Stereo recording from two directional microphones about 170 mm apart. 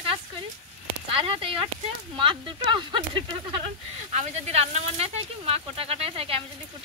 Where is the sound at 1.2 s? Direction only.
35° right (ahead or behind).